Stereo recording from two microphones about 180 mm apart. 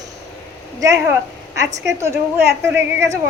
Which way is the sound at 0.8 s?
20° right (ahead or behind).